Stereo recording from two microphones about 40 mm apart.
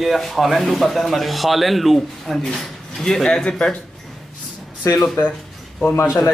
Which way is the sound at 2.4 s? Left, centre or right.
Centre.